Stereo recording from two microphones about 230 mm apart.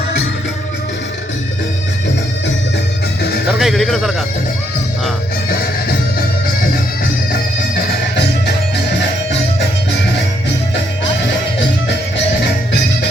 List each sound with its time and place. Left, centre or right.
3.6 s a man's voice: centre
9.0 s music: left
12.4 s music: left